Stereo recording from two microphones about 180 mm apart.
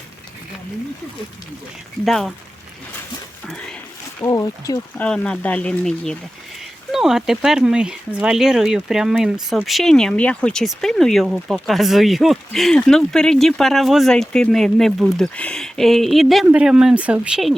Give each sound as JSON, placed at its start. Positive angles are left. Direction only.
{"t": 2.0, "sound": "speech", "side_deg": 0}
{"t": 3.4, "sound": "a sound", "side_deg": 5}
{"t": 4.2, "sound": "speech", "side_deg": 20}
{"t": 5.0, "sound": "speech", "side_deg": 5}